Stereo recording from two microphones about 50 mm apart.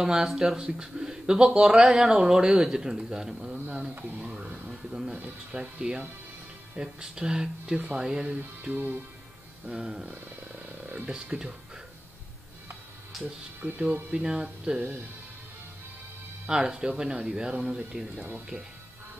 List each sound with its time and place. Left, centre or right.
0.0 s speech: centre
4.2 s a sound: right
4.9 s a sound: centre
5.5 s speech: centre
11.1 s speech: centre
13.6 s speech: centre
16.4 s speech: centre